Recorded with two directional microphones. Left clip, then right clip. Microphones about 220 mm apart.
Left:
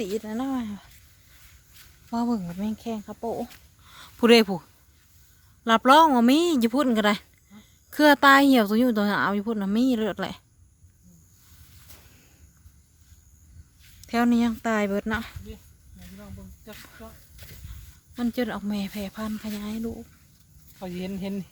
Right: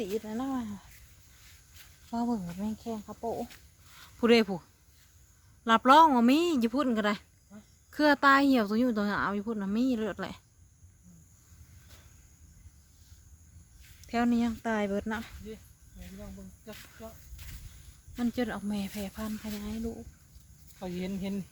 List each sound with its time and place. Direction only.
0.3 s speech: 35° left (ahead or behind)
2.0 s speech: 35° left (ahead or behind)
4.0 s speech: 30° left (ahead or behind)
5.6 s speech: 20° left (ahead or behind)
14.0 s speech: 30° left (ahead or behind)
16.6 s snake: 15° left (ahead or behind)
18.2 s speech: 30° left (ahead or behind)
20.7 s speech: 45° left (ahead or behind)